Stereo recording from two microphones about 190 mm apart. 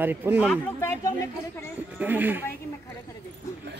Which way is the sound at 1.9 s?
10° right (ahead or behind).